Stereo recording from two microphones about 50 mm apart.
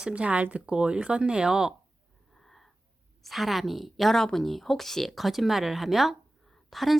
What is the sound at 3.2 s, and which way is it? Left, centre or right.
Speech, centre.